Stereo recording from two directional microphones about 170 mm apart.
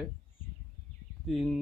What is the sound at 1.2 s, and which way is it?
Speech, centre (ahead or behind).